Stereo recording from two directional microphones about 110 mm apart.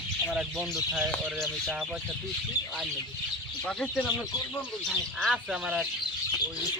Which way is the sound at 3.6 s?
10° left (ahead or behind).